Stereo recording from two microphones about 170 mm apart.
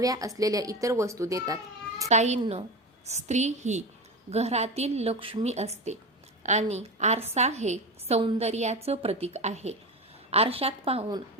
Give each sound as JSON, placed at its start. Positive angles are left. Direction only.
{"t": 0.0, "sound": "a woman's voice", "side_deg": -20}
{"t": 2.0, "sound": "a woman's voice", "side_deg": -40}